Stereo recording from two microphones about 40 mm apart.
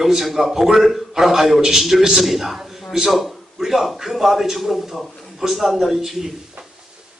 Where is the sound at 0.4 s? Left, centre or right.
Centre.